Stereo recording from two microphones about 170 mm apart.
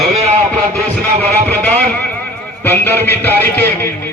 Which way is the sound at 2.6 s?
10° left (ahead or behind).